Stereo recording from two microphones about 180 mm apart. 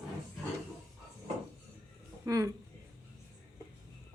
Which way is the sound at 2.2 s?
20° right (ahead or behind).